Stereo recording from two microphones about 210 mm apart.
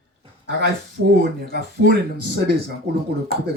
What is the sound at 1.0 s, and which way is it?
Speech, 45° right (ahead or behind).